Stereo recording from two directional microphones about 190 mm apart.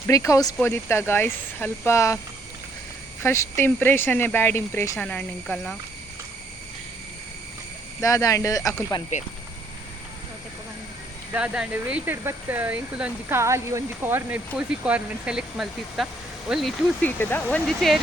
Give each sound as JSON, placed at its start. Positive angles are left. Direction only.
{"t": 0.1, "sound": "speech", "side_deg": 15}
{"t": 3.2, "sound": "speech", "side_deg": 15}
{"t": 8.0, "sound": "speech", "side_deg": 15}
{"t": 9.1, "sound": "speech", "side_deg": 40}
{"t": 11.3, "sound": "speech", "side_deg": -5}